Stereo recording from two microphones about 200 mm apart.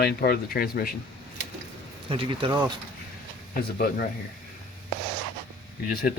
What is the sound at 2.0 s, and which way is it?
Speech, 25° right (ahead or behind).